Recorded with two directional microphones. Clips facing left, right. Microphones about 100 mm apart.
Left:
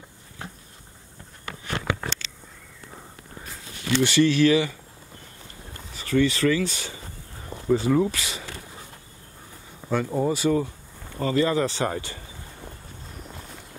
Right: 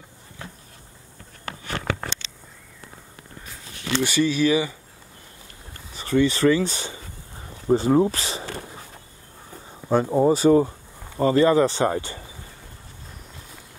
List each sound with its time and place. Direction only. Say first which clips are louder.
4.0 s speech: left 2 dB; 10° right (ahead or behind)
5.9 s speech: right 2 dB; 25° right (ahead or behind)
9.8 s speech: right 6 dB; 30° right (ahead or behind)